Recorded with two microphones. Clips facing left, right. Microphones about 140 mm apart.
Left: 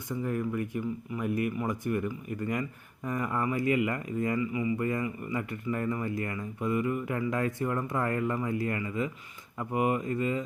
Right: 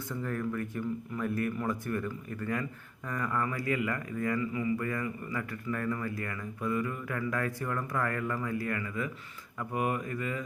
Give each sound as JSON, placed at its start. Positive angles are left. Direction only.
{"t": 0.1, "sound": "speech", "side_deg": 15}